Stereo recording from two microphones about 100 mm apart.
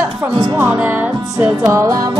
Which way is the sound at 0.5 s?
20° right (ahead or behind).